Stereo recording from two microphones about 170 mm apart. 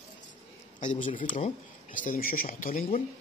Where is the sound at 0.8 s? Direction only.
50° left (ahead or behind).